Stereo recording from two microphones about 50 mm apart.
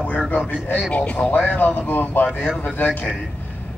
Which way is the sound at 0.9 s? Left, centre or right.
Left.